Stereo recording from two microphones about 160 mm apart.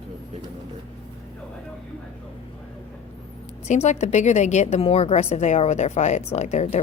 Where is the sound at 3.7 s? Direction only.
45° left (ahead or behind).